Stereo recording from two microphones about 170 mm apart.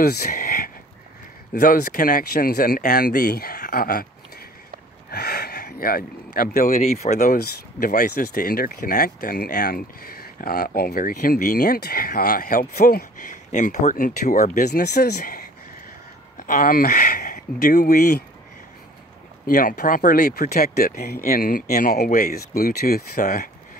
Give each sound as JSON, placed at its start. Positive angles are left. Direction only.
{"t": 0.0, "sound": "speech", "side_deg": 65}
{"t": 5.1, "sound": "speech", "side_deg": 70}
{"t": 7.3, "sound": "speech", "side_deg": 65}
{"t": 14.7, "sound": "speech", "side_deg": 70}
{"t": 15.1, "sound": "speech", "side_deg": 55}
{"t": 19.4, "sound": "speech", "side_deg": 55}